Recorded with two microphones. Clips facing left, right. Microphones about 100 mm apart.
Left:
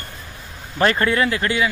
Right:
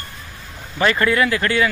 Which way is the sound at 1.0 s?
30° left (ahead or behind).